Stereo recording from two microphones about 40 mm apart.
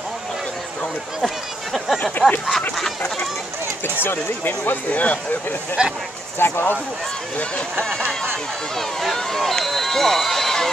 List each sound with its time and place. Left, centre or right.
1.2 s a sound: centre
3.8 s speech: left
4.9 s speech: left
5.8 s speech: right
6.3 s speech: left
9.1 s speech: centre